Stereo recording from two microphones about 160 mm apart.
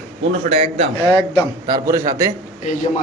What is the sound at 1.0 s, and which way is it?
Speech, 35° left (ahead or behind).